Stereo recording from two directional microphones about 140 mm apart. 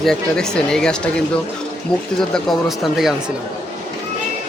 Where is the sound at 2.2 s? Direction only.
Centre (ahead or behind).